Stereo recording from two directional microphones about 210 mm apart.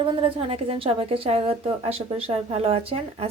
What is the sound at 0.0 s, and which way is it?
A woman's voice, 25° right (ahead or behind).